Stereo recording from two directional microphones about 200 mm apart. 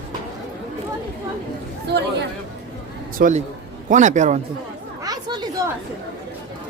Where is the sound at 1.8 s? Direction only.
55° right (ahead or behind).